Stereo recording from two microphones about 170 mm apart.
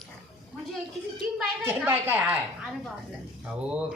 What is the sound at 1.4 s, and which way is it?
Speech, 10° right (ahead or behind).